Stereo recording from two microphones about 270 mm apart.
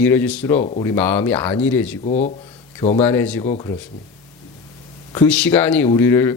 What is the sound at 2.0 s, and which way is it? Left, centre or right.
Speech, left.